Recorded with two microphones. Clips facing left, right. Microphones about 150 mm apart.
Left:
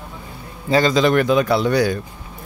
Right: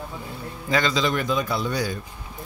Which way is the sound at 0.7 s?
35° left (ahead or behind).